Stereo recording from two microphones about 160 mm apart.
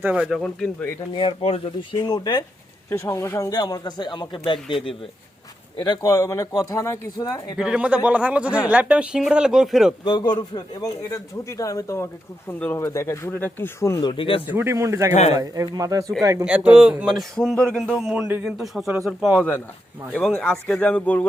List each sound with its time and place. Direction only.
0.0 s a man's voice: 5° right (ahead or behind)
1.1 s speech: 35° left (ahead or behind)
2.0 s speech: 25° left (ahead or behind)
7.6 s a man's voice: 5° right (ahead or behind)
10.0 s speech: 30° left (ahead or behind)
14.1 s speech: 30° left (ahead or behind)
14.4 s speech: 15° right (ahead or behind)
15.1 s speech: 45° left (ahead or behind)
15.4 s speech: 25° right (ahead or behind)
16.4 s a man's voice: 5° right (ahead or behind); by 21.2 s 10° left (ahead or behind)